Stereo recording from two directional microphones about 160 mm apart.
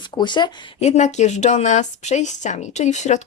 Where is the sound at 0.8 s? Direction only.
45° left (ahead or behind).